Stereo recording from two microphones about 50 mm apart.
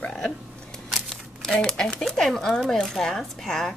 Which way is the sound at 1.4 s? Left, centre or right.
Centre.